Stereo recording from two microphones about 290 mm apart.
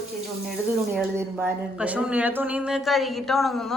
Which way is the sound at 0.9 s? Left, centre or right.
Centre.